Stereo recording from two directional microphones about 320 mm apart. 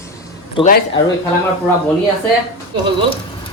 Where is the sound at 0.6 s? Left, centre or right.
Left.